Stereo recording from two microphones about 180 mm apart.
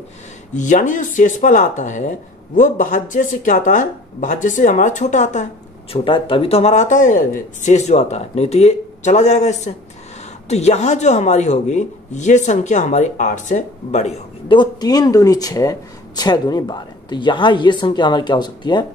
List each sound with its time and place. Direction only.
0.6 s speech: 45° left (ahead or behind)
5.9 s a man's voice: 30° left (ahead or behind)
14.6 s speech: 20° left (ahead or behind)